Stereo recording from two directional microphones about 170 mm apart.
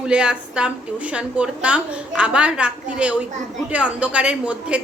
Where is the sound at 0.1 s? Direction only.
5° right (ahead or behind).